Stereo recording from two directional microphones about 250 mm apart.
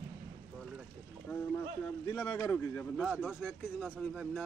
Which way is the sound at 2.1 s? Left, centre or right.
Centre.